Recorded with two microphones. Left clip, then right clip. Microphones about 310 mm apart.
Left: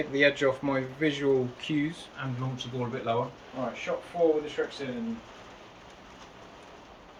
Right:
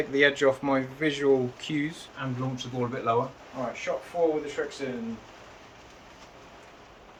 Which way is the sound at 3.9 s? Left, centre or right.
Right.